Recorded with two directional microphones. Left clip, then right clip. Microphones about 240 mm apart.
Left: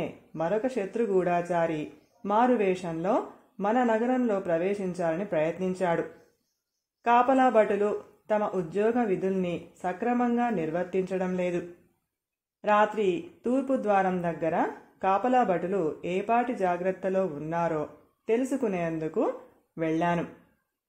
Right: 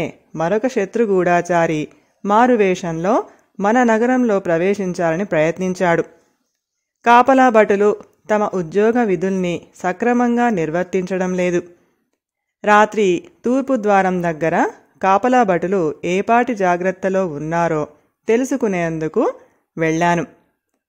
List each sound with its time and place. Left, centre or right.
0.0 s speech: right
12.6 s speech: right